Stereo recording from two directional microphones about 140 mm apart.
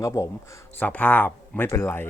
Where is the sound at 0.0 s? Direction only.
20° left (ahead or behind).